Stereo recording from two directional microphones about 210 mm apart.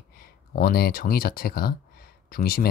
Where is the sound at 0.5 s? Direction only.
45° left (ahead or behind).